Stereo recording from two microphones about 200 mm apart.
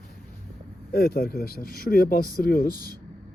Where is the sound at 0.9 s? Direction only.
50° left (ahead or behind).